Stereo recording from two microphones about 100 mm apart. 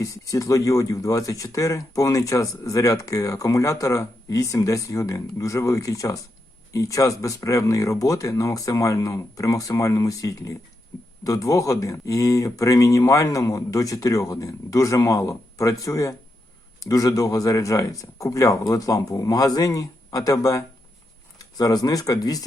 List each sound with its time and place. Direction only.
0.0 s speech: 35° left (ahead or behind)